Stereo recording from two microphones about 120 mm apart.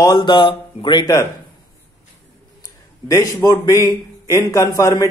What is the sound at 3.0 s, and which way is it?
Speech, 25° left (ahead or behind).